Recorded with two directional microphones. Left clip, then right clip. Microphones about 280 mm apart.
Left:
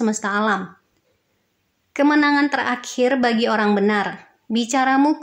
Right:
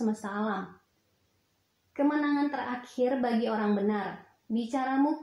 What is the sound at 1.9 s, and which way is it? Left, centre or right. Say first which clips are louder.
Speech: left 12 dB; right.